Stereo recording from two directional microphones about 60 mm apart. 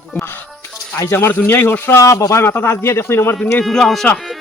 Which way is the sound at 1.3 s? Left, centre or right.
Left.